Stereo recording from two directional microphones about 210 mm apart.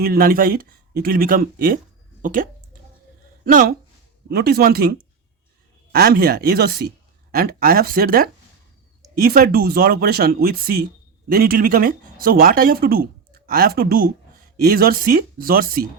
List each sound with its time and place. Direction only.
0.0 s speech: 45° right (ahead or behind)